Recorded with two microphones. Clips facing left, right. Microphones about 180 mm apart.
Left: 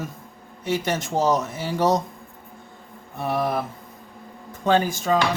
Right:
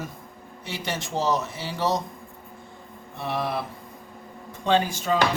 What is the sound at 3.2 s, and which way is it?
Speech, 45° left (ahead or behind).